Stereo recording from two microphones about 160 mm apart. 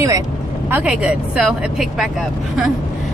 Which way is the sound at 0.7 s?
10° right (ahead or behind).